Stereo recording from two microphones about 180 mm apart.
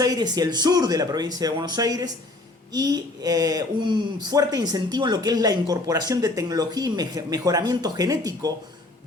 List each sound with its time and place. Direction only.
0.0 s speech: 20° right (ahead or behind)